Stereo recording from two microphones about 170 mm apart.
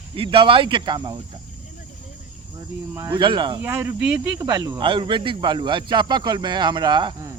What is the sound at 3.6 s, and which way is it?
Speech, 15° right (ahead or behind).